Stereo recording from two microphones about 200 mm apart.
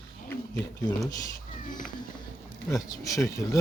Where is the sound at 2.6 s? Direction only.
15° left (ahead or behind).